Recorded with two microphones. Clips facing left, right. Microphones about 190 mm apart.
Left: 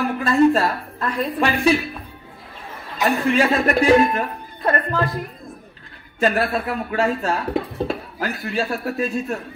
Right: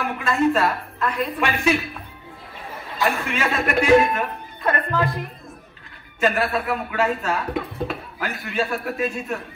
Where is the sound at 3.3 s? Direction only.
35° left (ahead or behind).